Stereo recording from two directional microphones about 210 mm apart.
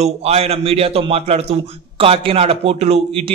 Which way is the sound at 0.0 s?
30° right (ahead or behind).